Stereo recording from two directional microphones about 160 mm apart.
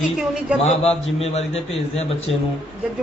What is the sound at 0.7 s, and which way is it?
A man's voice, 40° left (ahead or behind).